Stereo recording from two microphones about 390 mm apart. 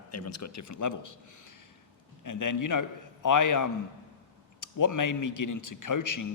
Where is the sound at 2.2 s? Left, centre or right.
Left.